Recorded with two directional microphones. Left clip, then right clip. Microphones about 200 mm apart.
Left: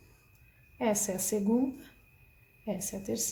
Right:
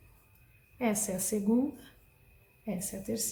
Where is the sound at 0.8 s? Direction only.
35° left (ahead or behind).